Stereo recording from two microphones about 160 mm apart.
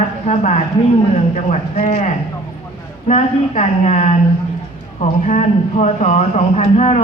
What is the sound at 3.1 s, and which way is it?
Speech, 50° left (ahead or behind).